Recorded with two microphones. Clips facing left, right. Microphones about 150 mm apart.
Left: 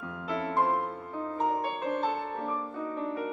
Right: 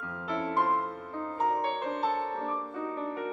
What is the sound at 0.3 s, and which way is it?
Music, 5° left (ahead or behind).